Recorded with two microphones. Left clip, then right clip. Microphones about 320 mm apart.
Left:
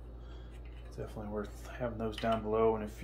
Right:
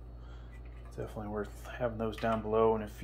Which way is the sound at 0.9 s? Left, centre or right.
Centre.